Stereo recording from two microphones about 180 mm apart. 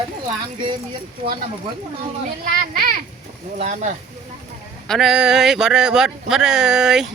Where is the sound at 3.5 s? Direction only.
40° right (ahead or behind).